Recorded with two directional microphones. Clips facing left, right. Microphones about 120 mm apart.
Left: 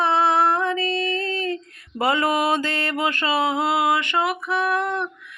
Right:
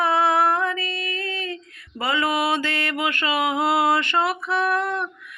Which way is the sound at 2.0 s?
50° left (ahead or behind).